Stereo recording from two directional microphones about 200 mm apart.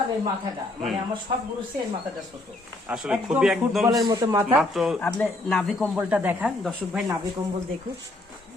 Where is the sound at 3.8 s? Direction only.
15° right (ahead or behind).